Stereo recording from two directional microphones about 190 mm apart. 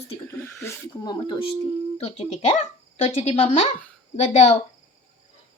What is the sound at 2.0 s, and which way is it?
Speech, 35° left (ahead or behind).